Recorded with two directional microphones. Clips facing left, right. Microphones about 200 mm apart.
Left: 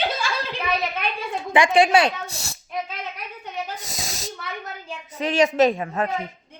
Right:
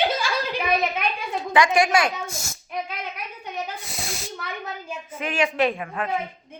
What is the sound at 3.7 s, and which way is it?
A woman's voice, 40° left (ahead or behind).